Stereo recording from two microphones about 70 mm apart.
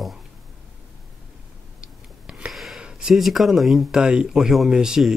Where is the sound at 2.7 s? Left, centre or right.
Centre.